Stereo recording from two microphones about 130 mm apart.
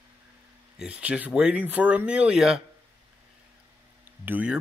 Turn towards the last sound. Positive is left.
turn(degrees=-10)  # may be behind; listen again after turning